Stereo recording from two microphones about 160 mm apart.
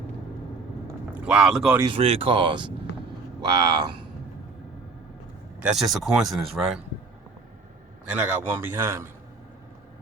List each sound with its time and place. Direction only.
1.2 s speech: 5° right (ahead or behind)
1.9 s speech: 40° right (ahead or behind)
5.5 s speech: 5° right (ahead or behind)
8.0 s a man's voice: 10° right (ahead or behind)